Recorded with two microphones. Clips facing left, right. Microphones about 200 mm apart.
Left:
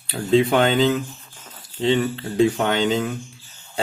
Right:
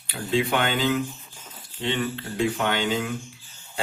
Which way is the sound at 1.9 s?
35° left (ahead or behind).